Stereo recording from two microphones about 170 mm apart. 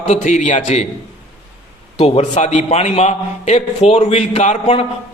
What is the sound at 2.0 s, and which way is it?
A man's voice, 35° left (ahead or behind).